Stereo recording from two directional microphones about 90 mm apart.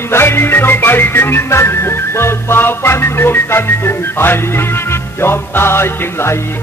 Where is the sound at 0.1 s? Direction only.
25° left (ahead or behind).